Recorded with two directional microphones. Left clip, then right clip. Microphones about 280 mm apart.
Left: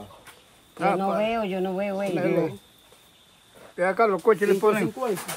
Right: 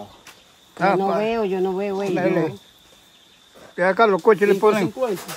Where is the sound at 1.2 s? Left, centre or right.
Centre.